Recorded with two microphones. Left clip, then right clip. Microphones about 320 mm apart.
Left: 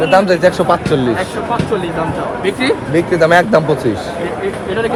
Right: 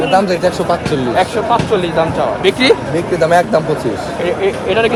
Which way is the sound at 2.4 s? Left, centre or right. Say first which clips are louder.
Right 5 dB; right.